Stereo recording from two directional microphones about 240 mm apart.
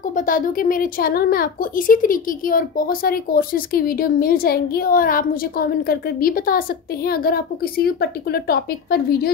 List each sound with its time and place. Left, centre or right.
0.1 s a woman's voice: left